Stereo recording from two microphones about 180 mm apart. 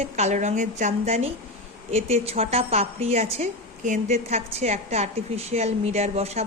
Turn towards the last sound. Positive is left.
turn(degrees=-35)  # may be behind; listen again after turning